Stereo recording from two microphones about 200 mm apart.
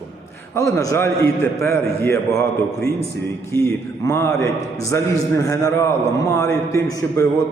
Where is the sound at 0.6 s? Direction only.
15° left (ahead or behind).